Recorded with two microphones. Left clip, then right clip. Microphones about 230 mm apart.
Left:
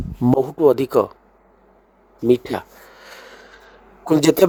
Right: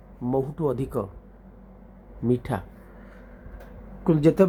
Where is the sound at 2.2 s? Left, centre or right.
Left.